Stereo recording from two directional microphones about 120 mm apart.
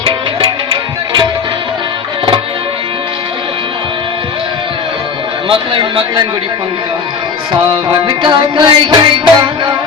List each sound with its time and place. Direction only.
0.0 s music: 45° right (ahead or behind)
5.5 s a man's voice: 45° right (ahead or behind)
7.5 s music: 40° right (ahead or behind)